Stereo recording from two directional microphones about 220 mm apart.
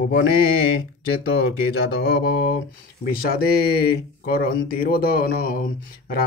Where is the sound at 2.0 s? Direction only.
45° left (ahead or behind).